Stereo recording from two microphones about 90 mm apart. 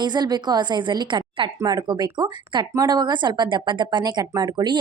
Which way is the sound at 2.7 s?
50° right (ahead or behind).